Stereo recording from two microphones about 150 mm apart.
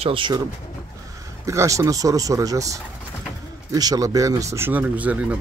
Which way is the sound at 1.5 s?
20° right (ahead or behind).